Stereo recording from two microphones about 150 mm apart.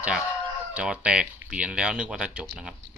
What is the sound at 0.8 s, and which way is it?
Speech, 5° right (ahead or behind).